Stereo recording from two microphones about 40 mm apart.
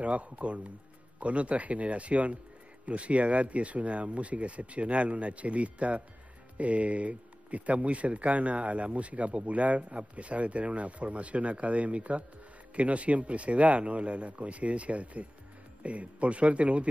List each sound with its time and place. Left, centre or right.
0.0 s speech: right